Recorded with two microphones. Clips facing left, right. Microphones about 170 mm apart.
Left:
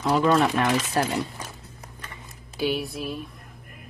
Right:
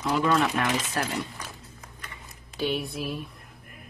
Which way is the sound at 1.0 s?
30° left (ahead or behind).